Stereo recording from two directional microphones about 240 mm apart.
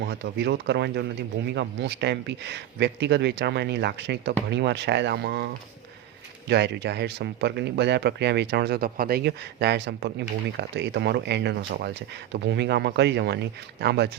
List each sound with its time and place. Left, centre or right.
0.0 s speech: right
6.5 s speech: right